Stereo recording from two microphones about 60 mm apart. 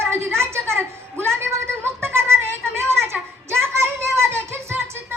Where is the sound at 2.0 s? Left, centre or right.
Right.